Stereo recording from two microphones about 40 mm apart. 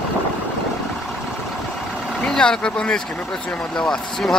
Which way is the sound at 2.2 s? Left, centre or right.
Centre.